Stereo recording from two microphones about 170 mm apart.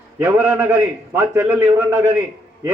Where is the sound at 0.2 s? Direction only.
10° right (ahead or behind).